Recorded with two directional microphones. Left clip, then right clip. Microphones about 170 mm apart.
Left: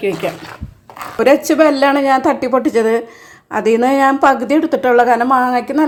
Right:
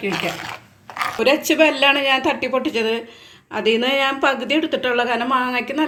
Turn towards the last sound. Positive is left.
turn(degrees=40)  # may be behind; listen again after turning